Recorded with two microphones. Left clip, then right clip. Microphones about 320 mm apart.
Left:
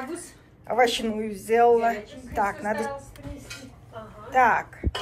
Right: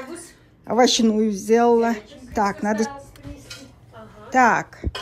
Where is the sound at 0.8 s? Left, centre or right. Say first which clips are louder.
Right 5 dB; centre.